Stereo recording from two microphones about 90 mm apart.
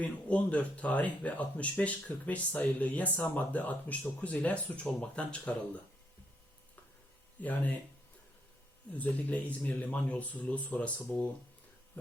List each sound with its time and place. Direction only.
0.0 s speech: 15° left (ahead or behind)
7.3 s speech: 15° left (ahead or behind)
8.9 s speech: 15° left (ahead or behind)